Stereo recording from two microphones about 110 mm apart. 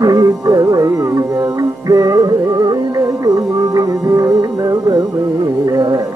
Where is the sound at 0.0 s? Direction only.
35° right (ahead or behind).